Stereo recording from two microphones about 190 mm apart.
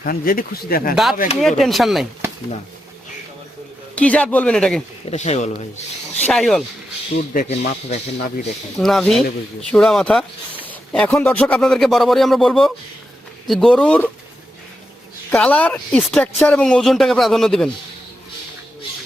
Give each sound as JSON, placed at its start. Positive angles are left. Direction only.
{"t": 0.0, "sound": "speech", "side_deg": 50}
{"t": 1.4, "sound": "speech", "side_deg": 0}
{"t": 3.9, "sound": "speech", "side_deg": 5}
{"t": 5.0, "sound": "speech", "side_deg": 35}
{"t": 6.2, "sound": "speech", "side_deg": 0}
{"t": 7.3, "sound": "speech", "side_deg": 35}
{"t": 8.8, "sound": "speech", "side_deg": 0}
{"t": 15.3, "sound": "speech", "side_deg": 5}